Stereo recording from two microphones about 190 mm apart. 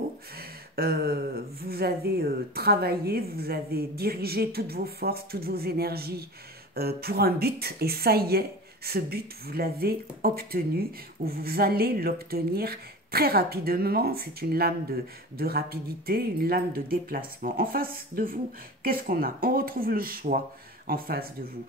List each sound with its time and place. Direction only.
0.4 s speech: 55° right (ahead or behind)